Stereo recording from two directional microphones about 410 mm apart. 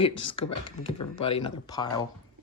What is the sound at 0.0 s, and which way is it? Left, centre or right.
Speech, centre.